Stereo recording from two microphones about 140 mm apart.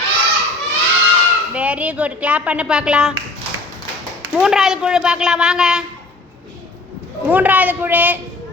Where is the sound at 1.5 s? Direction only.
10° right (ahead or behind).